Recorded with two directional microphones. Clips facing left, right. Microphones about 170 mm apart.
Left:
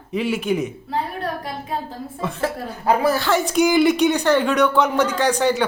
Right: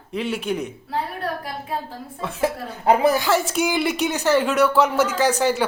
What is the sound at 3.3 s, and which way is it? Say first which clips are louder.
Speech: left 3 dB; centre (ahead or behind).